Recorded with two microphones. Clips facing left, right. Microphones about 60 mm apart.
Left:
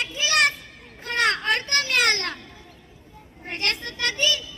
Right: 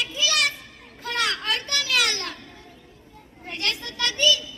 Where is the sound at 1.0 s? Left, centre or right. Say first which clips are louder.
Left 3 dB; left.